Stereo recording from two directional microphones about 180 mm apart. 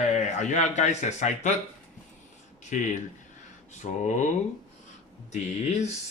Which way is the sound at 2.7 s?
45° left (ahead or behind).